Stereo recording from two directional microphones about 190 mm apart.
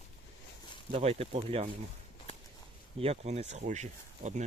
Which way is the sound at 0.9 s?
30° right (ahead or behind).